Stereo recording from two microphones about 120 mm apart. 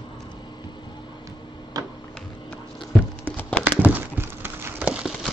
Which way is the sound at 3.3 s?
10° left (ahead or behind).